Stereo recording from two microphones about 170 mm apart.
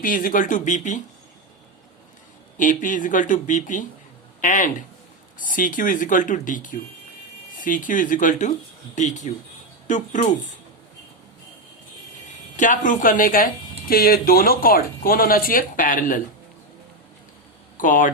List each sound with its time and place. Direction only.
0.0 s speech: 55° left (ahead or behind)
2.6 s speech: 50° left (ahead or behind)
12.5 s speech: 50° left (ahead or behind)
17.7 s speech: 50° left (ahead or behind)